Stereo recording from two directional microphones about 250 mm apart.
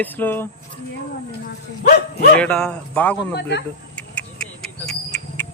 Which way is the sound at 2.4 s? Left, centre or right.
Centre.